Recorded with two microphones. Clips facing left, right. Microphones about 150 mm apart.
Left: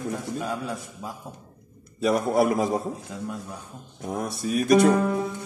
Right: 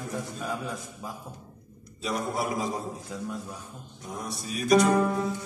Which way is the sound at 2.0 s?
55° left (ahead or behind).